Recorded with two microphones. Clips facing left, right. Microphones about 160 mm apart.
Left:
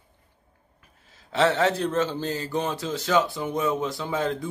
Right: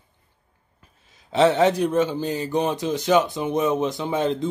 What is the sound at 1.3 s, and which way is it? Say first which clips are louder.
A man's voice: right 4 dB; 20° right (ahead or behind).